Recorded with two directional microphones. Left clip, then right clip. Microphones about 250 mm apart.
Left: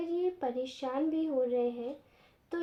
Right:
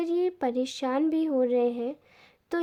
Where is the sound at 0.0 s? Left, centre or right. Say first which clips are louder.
Right 6 dB; right.